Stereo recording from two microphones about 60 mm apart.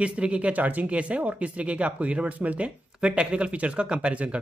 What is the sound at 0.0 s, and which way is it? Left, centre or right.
Speech, right.